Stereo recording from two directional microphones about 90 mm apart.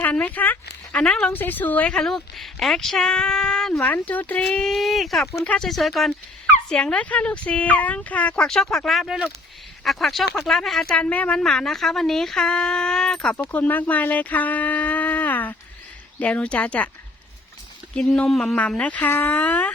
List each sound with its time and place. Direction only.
0.0 s speech: 15° left (ahead or behind); by 6.1 s centre (ahead or behind)
6.7 s speech: 10° left (ahead or behind)
10.9 s speech: 15° left (ahead or behind)
17.9 s speech: 5° left (ahead or behind)